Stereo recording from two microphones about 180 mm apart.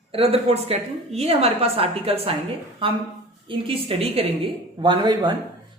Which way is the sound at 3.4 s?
30° right (ahead or behind).